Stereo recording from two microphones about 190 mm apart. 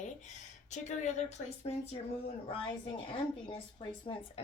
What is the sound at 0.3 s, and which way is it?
Speech, 40° left (ahead or behind).